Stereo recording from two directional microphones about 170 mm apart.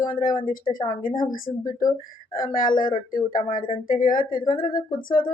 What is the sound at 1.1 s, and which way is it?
Speech, 30° left (ahead or behind).